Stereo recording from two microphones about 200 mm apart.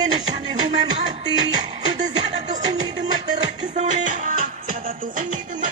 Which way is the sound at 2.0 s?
35° right (ahead or behind).